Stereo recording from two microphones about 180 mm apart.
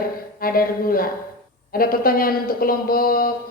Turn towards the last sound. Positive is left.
turn(degrees=55)  # may be behind; listen again after turning